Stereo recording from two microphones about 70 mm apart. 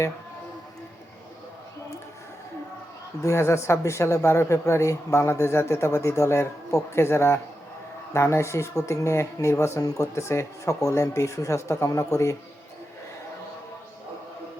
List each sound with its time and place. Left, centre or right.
3.2 s speech: left